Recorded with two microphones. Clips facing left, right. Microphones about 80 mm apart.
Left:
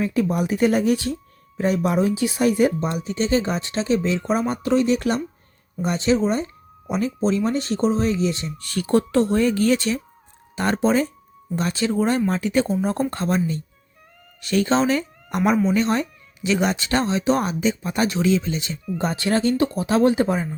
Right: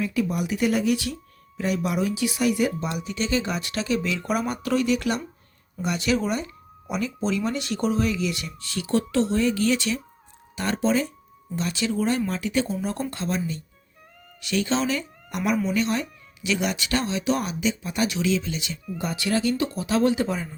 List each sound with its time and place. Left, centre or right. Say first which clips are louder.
0.0 s speech: left 4 dB; left
8.6 s speech: left 5 dB; left